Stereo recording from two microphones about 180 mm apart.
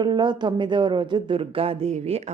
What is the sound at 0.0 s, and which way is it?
Speech, 25° right (ahead or behind).